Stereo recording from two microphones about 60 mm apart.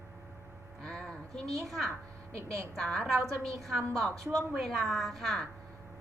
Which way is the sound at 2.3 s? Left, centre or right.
Right.